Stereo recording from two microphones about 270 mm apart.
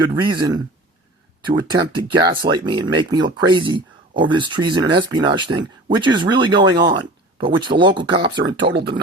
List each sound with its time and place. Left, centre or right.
0.0 s speech: centre
8.4 s speech: right